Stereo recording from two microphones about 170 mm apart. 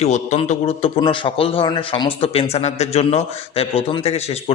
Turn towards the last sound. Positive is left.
turn(degrees=35)  # may be behind; listen again after turning